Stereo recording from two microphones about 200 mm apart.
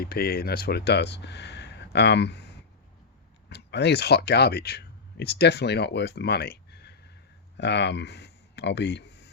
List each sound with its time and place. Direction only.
0.0 s speech: 50° left (ahead or behind)
3.5 s speech: 60° left (ahead or behind)